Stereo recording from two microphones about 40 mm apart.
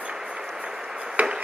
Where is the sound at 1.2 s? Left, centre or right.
Right.